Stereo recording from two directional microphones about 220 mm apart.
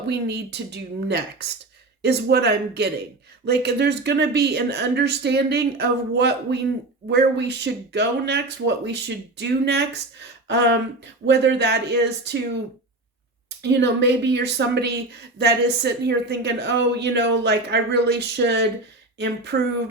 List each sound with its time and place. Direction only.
0.1 s speech: 50° right (ahead or behind)
13.6 s speech: 50° right (ahead or behind)